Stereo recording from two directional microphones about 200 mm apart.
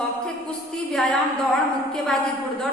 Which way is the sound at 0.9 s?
Centre (ahead or behind).